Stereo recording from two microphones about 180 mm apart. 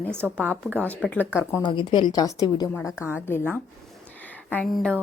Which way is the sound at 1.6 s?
25° left (ahead or behind).